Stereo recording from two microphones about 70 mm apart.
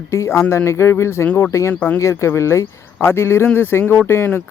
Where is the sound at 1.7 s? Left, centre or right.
Left.